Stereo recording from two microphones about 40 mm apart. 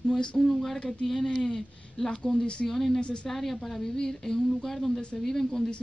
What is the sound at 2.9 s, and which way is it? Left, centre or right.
Speech, left.